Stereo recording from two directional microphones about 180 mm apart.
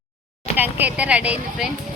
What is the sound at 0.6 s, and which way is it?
Speech, 10° right (ahead or behind).